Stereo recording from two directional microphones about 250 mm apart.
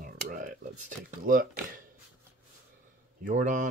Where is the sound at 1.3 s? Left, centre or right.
Right.